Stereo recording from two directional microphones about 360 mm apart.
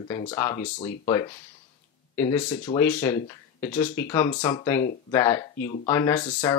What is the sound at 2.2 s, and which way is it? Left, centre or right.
Speech, centre.